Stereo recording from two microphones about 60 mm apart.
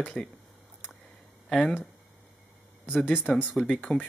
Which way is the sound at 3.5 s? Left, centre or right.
Centre.